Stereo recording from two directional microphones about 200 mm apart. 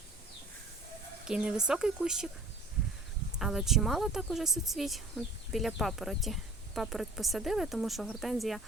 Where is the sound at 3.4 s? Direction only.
Centre (ahead or behind).